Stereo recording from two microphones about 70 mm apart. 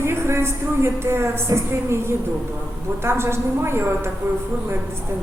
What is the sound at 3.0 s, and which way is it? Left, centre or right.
A woman's voice, right.